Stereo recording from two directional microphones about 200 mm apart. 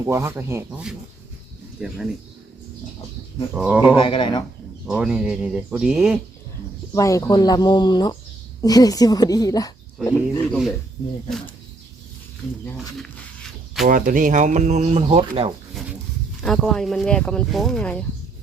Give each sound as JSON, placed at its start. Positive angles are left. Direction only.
{"t": 0.0, "sound": "speech", "side_deg": -15}
{"t": 3.5, "sound": "speech", "side_deg": -5}
{"t": 3.9, "sound": "speech", "side_deg": 25}
{"t": 4.9, "sound": "speech", "side_deg": -5}
{"t": 6.9, "sound": "speech", "side_deg": 15}
{"t": 13.8, "sound": "speech", "side_deg": -40}
{"t": 16.4, "sound": "speech", "side_deg": 0}